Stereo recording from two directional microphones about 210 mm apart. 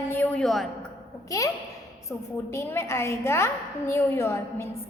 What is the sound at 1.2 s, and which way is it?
A woman's voice, 15° left (ahead or behind).